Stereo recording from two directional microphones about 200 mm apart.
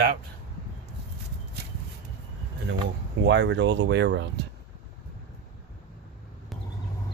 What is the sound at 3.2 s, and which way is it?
Speech, 65° right (ahead or behind).